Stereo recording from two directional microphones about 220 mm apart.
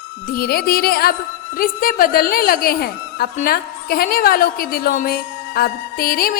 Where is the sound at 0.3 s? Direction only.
40° left (ahead or behind).